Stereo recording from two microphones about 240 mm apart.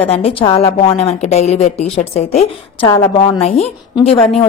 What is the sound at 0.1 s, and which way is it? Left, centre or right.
A woman's voice, left.